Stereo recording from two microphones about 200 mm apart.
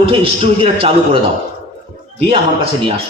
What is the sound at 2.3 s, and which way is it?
Speech, 30° right (ahead or behind).